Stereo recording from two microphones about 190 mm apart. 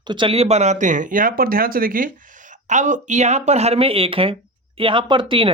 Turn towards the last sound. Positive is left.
turn(degrees=-25)  # may be behind; listen again after turning